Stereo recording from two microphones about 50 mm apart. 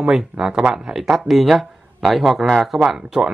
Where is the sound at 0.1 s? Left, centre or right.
Centre.